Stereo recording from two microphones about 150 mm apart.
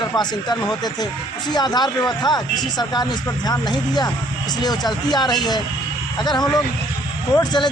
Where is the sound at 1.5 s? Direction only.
30° left (ahead or behind).